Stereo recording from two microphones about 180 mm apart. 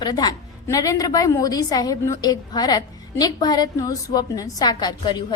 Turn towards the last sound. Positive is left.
turn(degrees=25)  # may be behind; listen again after turning